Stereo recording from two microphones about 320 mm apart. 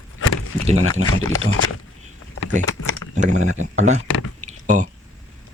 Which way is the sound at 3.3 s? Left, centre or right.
Right.